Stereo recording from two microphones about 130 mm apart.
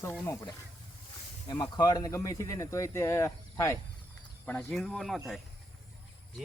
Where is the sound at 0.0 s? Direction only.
20° left (ahead or behind).